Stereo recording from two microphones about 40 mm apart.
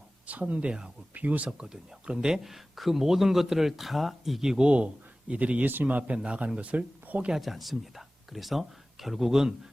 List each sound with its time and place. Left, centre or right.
0.3 s speech: right
1.5 s speech: right
2.4 s speech: centre
4.4 s speech: centre
4.6 s speech: right
5.6 s a man's voice: right
6.2 s speech: right
7.3 s speech: centre